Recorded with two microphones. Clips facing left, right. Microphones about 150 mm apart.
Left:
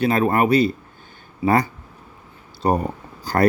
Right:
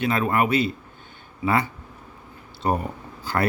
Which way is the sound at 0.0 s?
40° left (ahead or behind).